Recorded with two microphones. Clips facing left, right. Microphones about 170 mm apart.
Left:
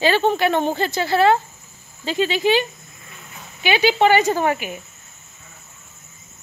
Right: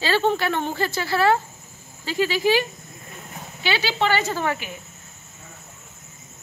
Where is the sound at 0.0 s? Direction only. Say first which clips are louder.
Left 4 dB; 20° left (ahead or behind).